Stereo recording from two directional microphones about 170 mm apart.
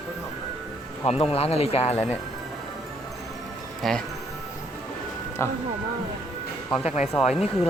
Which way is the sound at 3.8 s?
5° left (ahead or behind).